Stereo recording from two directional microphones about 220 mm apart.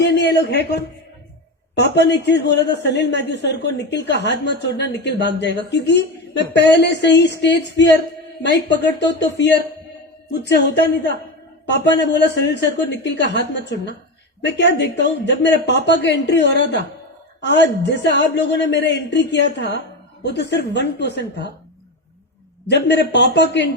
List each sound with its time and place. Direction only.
0.0 s a sound: 50° left (ahead or behind)
1.7 s a woman's voice: 50° left (ahead or behind)
22.7 s a woman's voice: 50° left (ahead or behind)